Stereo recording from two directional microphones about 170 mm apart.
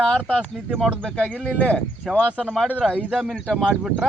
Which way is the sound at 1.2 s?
10° right (ahead or behind).